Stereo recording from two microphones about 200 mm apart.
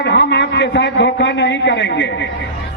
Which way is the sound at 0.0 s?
60° left (ahead or behind).